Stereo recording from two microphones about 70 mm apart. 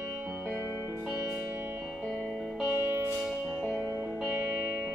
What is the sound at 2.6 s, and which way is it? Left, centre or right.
Music, right.